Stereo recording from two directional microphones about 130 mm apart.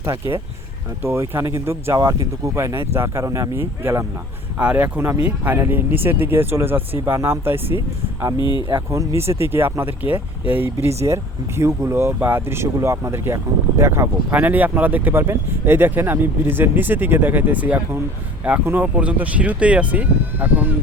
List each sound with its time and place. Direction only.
0.0 s speech: 20° right (ahead or behind)
8.4 s speech: 35° left (ahead or behind)
8.7 s speech: 20° right (ahead or behind)